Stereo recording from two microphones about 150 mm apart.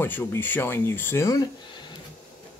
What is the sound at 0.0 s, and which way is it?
Speech, 15° left (ahead or behind).